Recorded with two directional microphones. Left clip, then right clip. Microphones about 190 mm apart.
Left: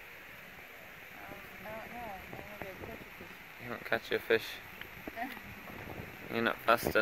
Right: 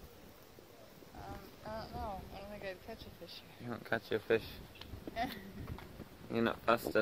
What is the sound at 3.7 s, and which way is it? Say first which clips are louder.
Speech: left 3 dB; 20° left (ahead or behind).